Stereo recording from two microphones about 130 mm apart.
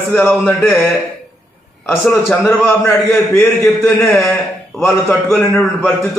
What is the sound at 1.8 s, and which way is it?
Speech, 15° left (ahead or behind).